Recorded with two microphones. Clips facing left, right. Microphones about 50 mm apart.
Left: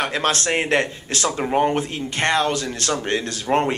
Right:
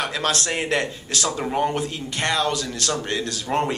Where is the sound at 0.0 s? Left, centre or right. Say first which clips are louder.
Left 3 dB; left.